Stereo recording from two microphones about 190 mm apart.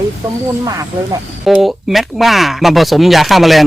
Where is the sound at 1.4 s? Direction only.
Centre (ahead or behind).